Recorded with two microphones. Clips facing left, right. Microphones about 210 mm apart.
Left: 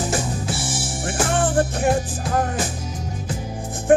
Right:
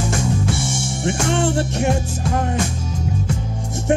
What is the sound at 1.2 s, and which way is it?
Music, 25° right (ahead or behind).